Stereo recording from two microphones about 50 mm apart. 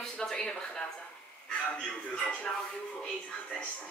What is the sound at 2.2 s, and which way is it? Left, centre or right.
Speech, left.